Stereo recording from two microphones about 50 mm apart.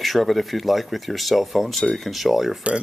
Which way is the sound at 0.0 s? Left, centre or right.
Centre.